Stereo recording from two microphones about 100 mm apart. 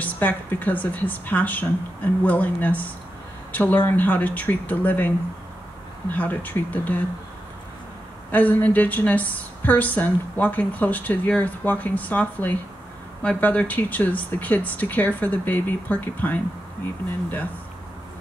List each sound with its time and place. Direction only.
0.0 s a woman's voice: 20° left (ahead or behind)
8.3 s a woman's voice: 15° left (ahead or behind)